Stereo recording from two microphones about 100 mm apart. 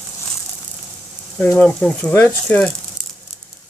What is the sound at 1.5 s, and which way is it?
Speech, 10° left (ahead or behind).